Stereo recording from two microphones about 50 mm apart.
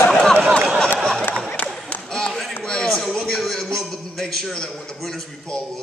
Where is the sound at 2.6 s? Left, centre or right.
Centre.